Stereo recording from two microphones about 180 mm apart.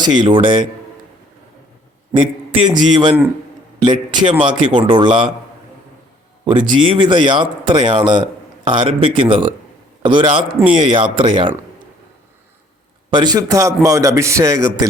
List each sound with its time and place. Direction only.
0.0 s speech: 25° right (ahead or behind)
2.1 s speech: 30° right (ahead or behind)
6.4 s speech: 25° right (ahead or behind)
13.1 s speech: 20° right (ahead or behind)